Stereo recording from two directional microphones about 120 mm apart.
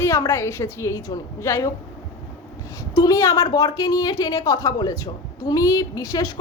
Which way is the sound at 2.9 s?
30° left (ahead or behind).